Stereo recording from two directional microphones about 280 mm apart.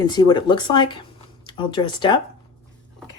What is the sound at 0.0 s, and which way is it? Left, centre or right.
Speech, centre.